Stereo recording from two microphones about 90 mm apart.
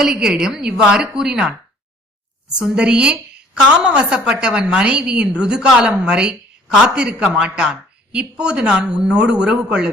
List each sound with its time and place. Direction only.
0.0 s a woman's voice: 5° right (ahead or behind)
2.6 s a woman's voice: 10° right (ahead or behind)